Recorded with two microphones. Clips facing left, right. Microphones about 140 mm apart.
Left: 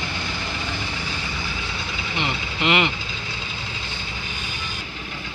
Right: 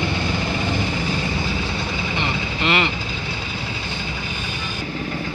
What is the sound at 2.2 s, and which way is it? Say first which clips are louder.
Vehicle: left 1 dB; 15° left (ahead or behind).